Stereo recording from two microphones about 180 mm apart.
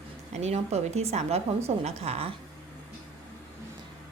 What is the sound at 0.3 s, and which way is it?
A woman's voice, 35° right (ahead or behind).